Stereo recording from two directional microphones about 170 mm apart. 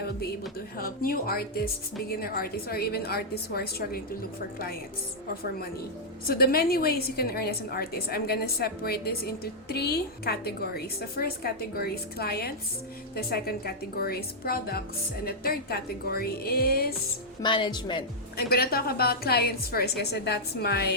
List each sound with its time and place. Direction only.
0.8 s a woman's voice: 60° left (ahead or behind)
6.2 s a woman's voice: 65° left (ahead or behind)
17.4 s a woman's voice: 30° left (ahead or behind)
18.3 s a woman's voice: 65° left (ahead or behind)